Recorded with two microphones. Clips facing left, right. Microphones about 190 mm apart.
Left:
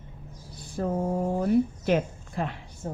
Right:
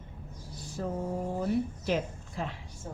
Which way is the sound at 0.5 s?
55° left (ahead or behind).